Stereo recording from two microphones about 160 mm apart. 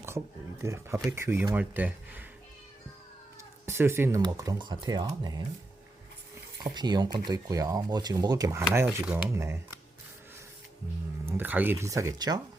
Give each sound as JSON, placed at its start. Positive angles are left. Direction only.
{"t": 0.6, "sound": "speech", "side_deg": -15}
{"t": 3.7, "sound": "speech", "side_deg": -15}
{"t": 6.7, "sound": "speech", "side_deg": -25}
{"t": 9.0, "sound": "speech", "side_deg": -5}
{"t": 9.3, "sound": "speech", "side_deg": -20}
{"t": 11.3, "sound": "speech", "side_deg": -10}